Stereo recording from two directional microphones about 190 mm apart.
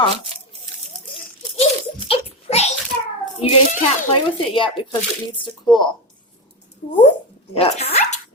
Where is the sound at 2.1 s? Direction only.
30° left (ahead or behind).